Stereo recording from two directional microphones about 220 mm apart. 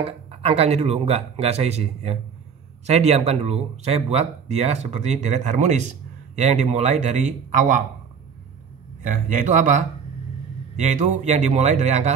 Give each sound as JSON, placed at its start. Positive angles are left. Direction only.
{"t": 0.0, "sound": "speech", "side_deg": -30}
{"t": 9.0, "sound": "speech", "side_deg": -35}